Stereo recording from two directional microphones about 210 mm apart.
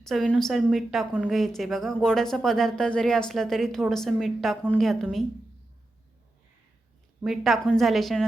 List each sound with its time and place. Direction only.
0.0 s a woman's voice: centre (ahead or behind)
7.2 s a woman's voice: centre (ahead or behind)